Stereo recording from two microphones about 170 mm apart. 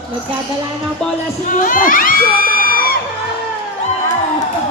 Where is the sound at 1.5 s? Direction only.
50° left (ahead or behind).